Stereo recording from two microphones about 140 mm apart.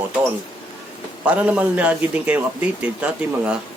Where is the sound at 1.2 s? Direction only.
10° right (ahead or behind).